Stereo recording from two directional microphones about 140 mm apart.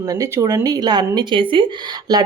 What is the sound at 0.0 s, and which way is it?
A woman's voice, 25° right (ahead or behind).